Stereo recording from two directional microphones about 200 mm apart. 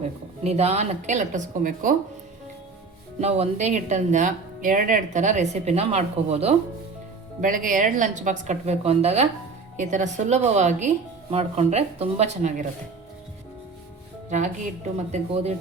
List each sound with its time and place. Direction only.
0.4 s speech: 30° right (ahead or behind)
3.2 s speech: 30° right (ahead or behind)
7.4 s speech: 40° right (ahead or behind)
14.3 s speech: 35° right (ahead or behind)